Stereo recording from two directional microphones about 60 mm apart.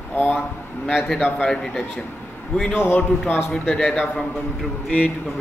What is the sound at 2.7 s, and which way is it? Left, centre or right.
Speech, left.